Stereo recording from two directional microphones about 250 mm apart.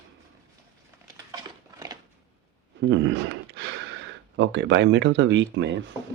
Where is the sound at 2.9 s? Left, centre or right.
Right.